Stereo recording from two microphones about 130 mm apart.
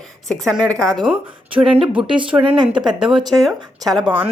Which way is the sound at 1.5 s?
45° right (ahead or behind).